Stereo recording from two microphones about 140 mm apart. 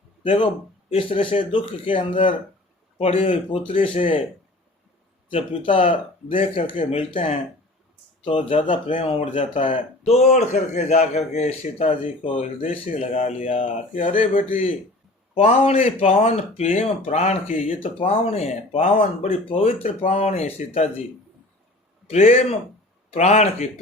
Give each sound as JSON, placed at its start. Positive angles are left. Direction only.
{"t": 0.2, "sound": "a man's voice", "side_deg": 40}
{"t": 5.3, "sound": "speech", "side_deg": 40}
{"t": 10.0, "sound": "a man's voice", "side_deg": 50}
{"t": 13.0, "sound": "a man's voice", "side_deg": 55}
{"t": 14.5, "sound": "a man's voice", "side_deg": 45}
{"t": 22.0, "sound": "a man's voice", "side_deg": 50}